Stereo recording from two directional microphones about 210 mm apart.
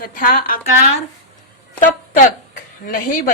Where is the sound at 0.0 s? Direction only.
40° left (ahead or behind).